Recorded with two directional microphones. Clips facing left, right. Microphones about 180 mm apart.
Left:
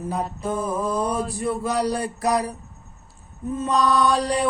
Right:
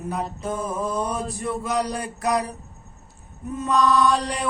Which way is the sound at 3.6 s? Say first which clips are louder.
Right 1 dB; 35° left (ahead or behind).